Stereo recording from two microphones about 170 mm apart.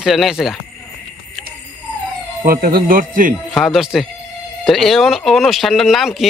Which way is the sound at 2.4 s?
60° right (ahead or behind).